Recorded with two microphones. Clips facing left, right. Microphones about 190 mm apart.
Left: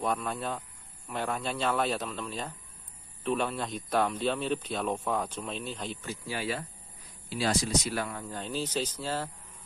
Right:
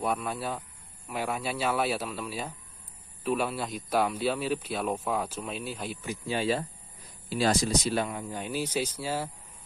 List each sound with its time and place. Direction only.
0.0 s speech: 5° right (ahead or behind)
6.2 s speech: 25° right (ahead or behind)
7.2 s speech: 45° right (ahead or behind); by 9.3 s 10° right (ahead or behind)